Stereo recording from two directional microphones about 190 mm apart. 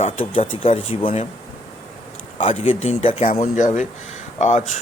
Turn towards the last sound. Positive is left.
turn(degrees=35)  # may be behind; listen again after turning